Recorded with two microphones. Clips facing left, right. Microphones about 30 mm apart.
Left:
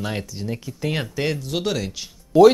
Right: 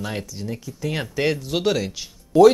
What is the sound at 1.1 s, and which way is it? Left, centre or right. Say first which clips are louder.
Speech: right 2 dB; centre.